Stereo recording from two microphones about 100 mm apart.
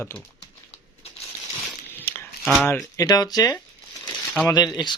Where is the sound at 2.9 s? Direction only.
40° left (ahead or behind).